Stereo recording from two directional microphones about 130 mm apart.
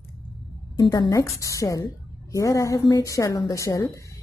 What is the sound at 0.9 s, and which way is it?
A woman's voice, 30° left (ahead or behind).